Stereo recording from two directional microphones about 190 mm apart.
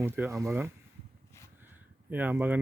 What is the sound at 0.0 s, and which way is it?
Speech, 15° right (ahead or behind).